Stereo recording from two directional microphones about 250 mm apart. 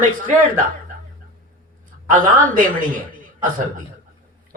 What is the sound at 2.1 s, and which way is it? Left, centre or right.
Speech, right.